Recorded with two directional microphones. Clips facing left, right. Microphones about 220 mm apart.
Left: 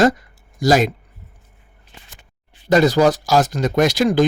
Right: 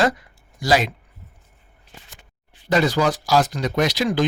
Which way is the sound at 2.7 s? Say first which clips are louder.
Left 5 dB; 40° left (ahead or behind).